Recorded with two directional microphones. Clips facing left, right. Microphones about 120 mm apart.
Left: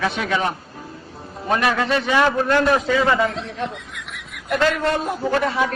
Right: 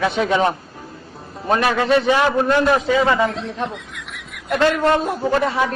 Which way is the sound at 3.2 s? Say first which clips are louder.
Right 2 dB; centre (ahead or behind).